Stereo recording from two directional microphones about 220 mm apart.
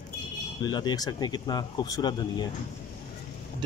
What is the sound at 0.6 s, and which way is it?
Speech, 20° left (ahead or behind).